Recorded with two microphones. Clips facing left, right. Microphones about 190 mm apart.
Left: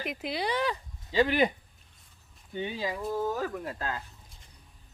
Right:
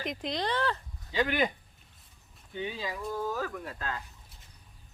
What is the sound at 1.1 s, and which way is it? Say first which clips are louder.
Speech: left 4 dB; 30° left (ahead or behind).